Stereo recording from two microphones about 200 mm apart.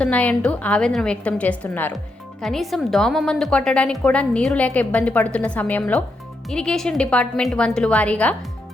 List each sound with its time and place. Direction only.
0.0 s a woman's voice: 5° left (ahead or behind)